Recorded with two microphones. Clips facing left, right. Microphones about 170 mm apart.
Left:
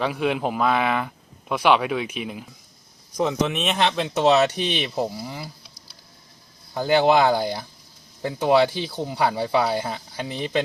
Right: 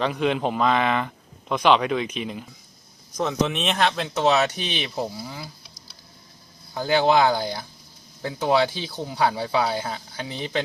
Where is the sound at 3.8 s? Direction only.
20° left (ahead or behind).